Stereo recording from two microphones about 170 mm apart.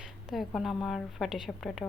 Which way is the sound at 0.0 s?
Centre (ahead or behind).